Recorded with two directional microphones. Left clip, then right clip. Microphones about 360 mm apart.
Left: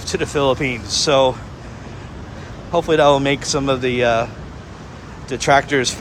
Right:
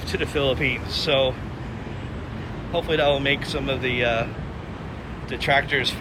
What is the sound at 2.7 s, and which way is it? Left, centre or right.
Speech, left.